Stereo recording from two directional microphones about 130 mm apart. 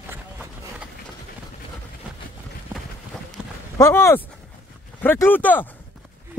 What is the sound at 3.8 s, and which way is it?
Speech, 20° left (ahead or behind).